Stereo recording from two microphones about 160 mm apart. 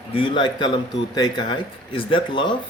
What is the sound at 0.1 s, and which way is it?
Speech, 30° left (ahead or behind).